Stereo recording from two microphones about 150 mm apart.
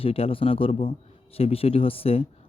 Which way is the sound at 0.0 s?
40° left (ahead or behind).